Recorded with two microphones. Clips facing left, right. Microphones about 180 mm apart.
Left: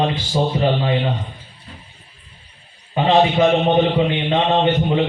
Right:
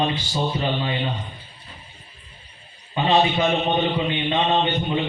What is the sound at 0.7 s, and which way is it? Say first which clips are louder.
Speech: left 6 dB; 75° left (ahead or behind).